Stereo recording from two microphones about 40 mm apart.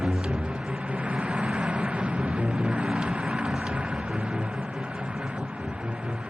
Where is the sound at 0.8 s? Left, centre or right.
Right.